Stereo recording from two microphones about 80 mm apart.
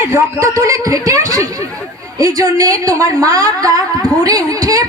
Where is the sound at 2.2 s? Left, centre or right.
Right.